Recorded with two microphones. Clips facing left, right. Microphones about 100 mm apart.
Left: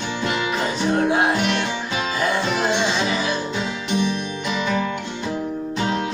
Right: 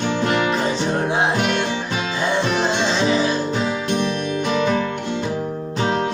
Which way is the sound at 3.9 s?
55° right (ahead or behind).